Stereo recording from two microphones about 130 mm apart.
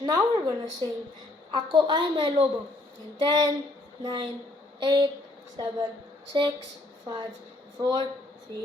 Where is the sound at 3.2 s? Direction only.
35° right (ahead or behind).